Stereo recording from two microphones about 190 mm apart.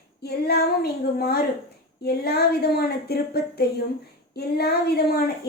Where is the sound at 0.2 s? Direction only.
55° left (ahead or behind).